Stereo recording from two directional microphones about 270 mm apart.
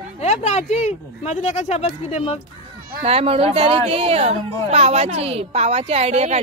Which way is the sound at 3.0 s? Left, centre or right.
Right.